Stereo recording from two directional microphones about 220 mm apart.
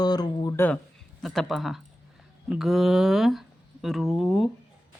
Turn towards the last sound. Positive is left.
turn(degrees=0)  # may be behind; listen again after turning